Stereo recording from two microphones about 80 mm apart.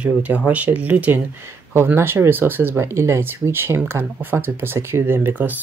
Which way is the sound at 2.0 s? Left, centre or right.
Right.